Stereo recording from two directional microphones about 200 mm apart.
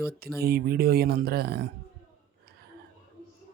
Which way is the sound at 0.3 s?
50° right (ahead or behind).